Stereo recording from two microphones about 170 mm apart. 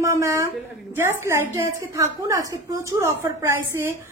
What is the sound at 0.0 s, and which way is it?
A woman's voice, 15° right (ahead or behind).